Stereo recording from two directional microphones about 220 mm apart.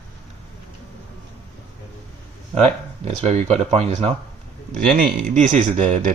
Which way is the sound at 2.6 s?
30° right (ahead or behind).